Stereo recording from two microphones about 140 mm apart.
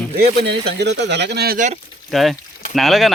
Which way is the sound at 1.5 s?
65° right (ahead or behind).